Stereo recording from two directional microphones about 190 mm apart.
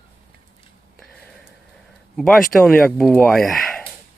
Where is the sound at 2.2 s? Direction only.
Centre (ahead or behind).